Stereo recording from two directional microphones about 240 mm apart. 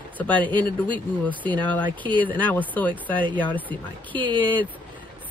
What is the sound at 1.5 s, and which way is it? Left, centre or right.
Speech, centre.